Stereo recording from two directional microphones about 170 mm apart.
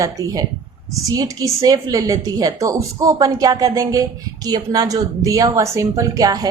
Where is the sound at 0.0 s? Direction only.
20° right (ahead or behind).